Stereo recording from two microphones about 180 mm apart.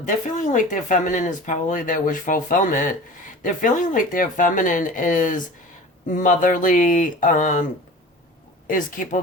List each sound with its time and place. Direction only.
0.0 s speech: 45° left (ahead or behind)
8.6 s speech: 50° left (ahead or behind)